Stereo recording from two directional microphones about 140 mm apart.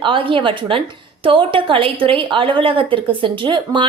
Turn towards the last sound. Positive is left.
turn(degrees=-35)  # may be behind; listen again after turning